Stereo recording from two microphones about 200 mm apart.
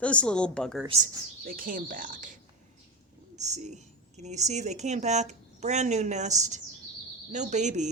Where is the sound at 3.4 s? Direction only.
35° right (ahead or behind).